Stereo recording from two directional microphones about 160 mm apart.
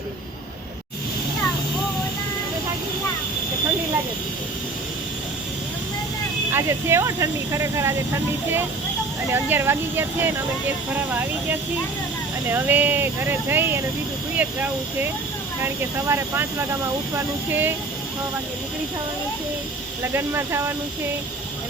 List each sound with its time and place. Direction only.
6.5 s speech: 15° right (ahead or behind)
20.1 s speech: 15° right (ahead or behind)